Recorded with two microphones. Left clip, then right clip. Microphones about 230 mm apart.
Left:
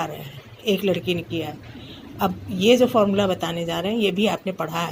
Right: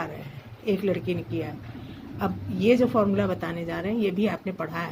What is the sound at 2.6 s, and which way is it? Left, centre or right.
Speech, centre.